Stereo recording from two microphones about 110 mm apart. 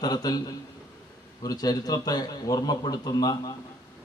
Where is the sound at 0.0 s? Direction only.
35° left (ahead or behind).